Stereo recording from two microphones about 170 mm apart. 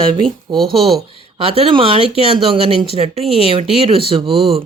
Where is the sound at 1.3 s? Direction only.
35° right (ahead or behind).